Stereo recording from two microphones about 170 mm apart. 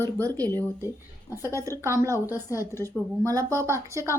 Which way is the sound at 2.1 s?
20° left (ahead or behind).